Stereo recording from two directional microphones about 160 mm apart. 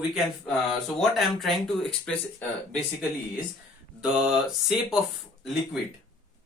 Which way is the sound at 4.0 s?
5° right (ahead or behind).